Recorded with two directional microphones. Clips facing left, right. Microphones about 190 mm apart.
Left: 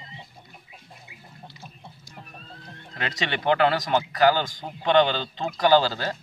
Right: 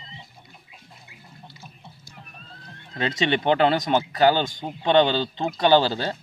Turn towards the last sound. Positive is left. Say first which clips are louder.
# right 1 dB
turn(degrees=-20)  # may be behind; listen again after turning